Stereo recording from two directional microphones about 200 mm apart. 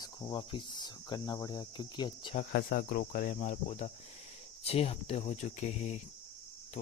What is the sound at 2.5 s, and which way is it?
Speech, 50° left (ahead or behind).